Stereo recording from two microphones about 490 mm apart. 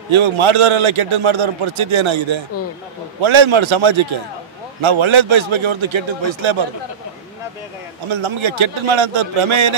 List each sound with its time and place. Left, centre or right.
0.1 s a man's voice: right
8.1 s a man's voice: right